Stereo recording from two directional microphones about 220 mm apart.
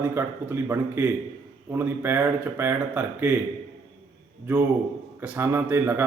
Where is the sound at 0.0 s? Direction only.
10° right (ahead or behind).